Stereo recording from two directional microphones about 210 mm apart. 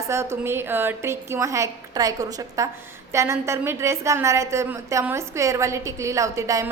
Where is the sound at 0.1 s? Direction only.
10° right (ahead or behind).